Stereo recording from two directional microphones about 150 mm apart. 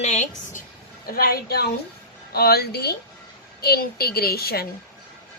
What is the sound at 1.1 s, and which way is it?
A woman's voice, 85° left.